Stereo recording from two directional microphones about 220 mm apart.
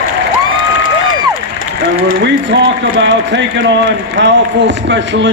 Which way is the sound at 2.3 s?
50° right (ahead or behind).